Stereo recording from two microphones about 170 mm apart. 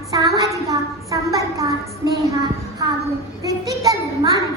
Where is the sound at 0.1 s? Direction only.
20° right (ahead or behind).